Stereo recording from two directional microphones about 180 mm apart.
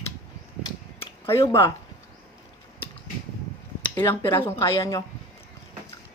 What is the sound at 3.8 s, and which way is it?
Speech, 25° left (ahead or behind).